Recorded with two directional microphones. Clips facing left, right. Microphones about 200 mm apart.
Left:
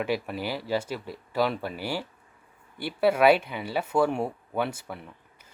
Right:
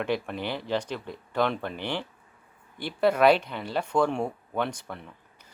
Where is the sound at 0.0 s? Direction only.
5° left (ahead or behind).